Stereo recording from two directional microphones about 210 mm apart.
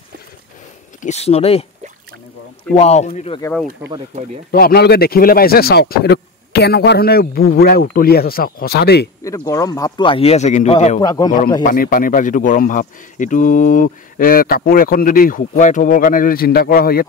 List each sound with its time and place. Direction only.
1.0 s speech: 30° left (ahead or behind)
2.7 s speech: 30° left (ahead or behind)
4.1 s speech: 35° right (ahead or behind)
4.5 s a man's voice: 45° left (ahead or behind)
9.2 s speech: 15° left (ahead or behind)
11.6 s speech: 40° left (ahead or behind)